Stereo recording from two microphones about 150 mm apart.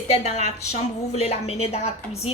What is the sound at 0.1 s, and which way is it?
A woman's voice, 45° left (ahead or behind).